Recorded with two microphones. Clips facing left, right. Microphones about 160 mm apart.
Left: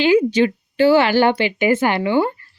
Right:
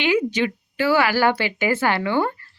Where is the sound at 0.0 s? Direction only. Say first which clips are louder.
Left 6 dB; 30° left (ahead or behind).